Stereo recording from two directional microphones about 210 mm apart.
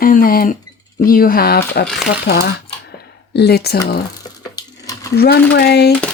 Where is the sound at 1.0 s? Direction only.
45° left (ahead or behind).